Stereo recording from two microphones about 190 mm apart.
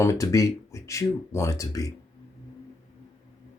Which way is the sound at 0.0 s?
15° left (ahead or behind).